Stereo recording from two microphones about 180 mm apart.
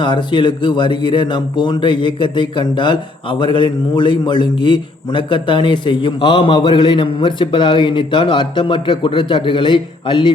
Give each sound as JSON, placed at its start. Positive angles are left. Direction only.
{"t": 0.0, "sound": "speech", "side_deg": 25}